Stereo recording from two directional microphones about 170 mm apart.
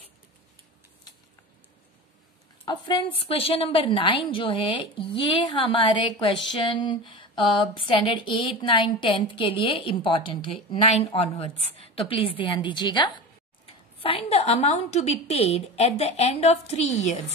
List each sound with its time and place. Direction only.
2.6 s a woman's voice: 30° left (ahead or behind)